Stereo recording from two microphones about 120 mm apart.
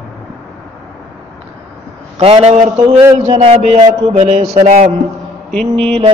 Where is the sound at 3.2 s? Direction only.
55° right (ahead or behind).